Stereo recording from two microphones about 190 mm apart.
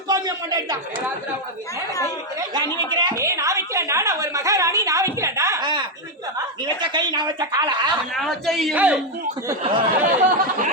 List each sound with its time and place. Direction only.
0.1 s speech: 20° right (ahead or behind)
2.4 s speech: 20° right (ahead or behind)
6.8 s speech: 25° right (ahead or behind)
8.1 s a man's voice: centre (ahead or behind)
10.0 s speech: 45° right (ahead or behind)